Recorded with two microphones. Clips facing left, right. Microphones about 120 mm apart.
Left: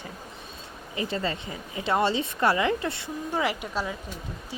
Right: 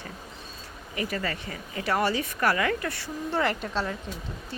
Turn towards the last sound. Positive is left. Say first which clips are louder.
# right 1 dB
turn(degrees=10)  # may be behind; listen again after turning